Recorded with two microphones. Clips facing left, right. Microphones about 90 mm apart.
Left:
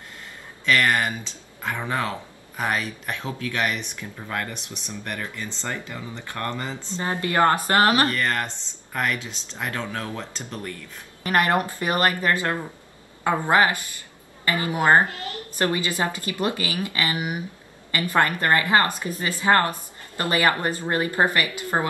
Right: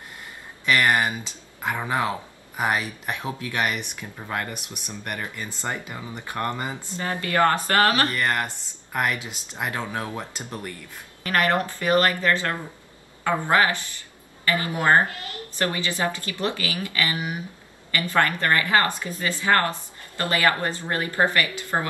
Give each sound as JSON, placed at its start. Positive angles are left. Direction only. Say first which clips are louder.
{"t": 0.7, "sound": "speech", "louder": "even", "side_deg": -15}
{"t": 7.0, "sound": "a woman's voice", "louder": "left 1 dB", "side_deg": 25}
{"t": 8.1, "sound": "speech", "louder": "even", "side_deg": -15}
{"t": 11.2, "sound": "a woman's voice", "louder": "left 1 dB", "side_deg": 20}
{"t": 21.7, "sound": "a woman's voice", "louder": "left 2 dB", "side_deg": 15}